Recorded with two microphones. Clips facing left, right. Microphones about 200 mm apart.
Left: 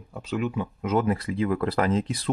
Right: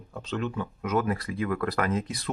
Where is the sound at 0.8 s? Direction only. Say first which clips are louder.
Left 3 dB; 25° left (ahead or behind).